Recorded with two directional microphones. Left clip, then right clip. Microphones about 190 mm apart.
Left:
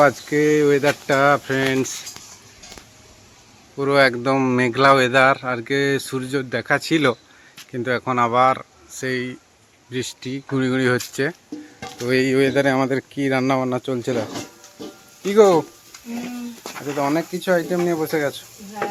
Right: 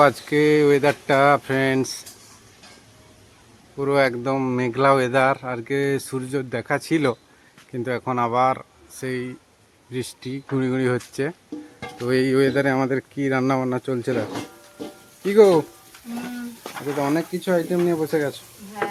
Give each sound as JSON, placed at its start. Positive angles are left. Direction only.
{"t": 0.0, "sound": "speech", "side_deg": -5}
{"t": 3.8, "sound": "speech", "side_deg": 0}
{"t": 15.2, "sound": "speech", "side_deg": -15}
{"t": 17.0, "sound": "speech", "side_deg": -10}